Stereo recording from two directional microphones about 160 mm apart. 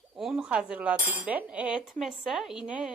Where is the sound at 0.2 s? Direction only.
5° right (ahead or behind).